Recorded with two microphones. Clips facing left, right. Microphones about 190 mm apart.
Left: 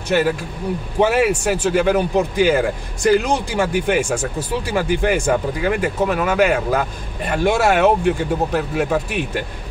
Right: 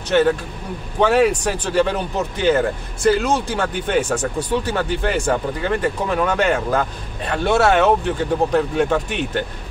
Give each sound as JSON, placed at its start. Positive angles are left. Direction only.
{"t": 1.0, "sound": "speech", "side_deg": 5}